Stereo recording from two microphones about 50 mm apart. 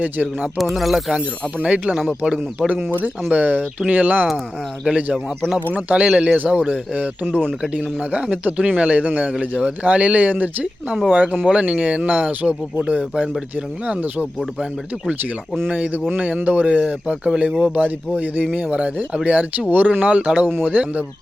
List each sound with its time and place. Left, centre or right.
0.0 s speech: right
0.6 s speech: centre
1.1 s speech: right
10.9 s speech: centre
11.4 s speech: centre
15.7 s speech: right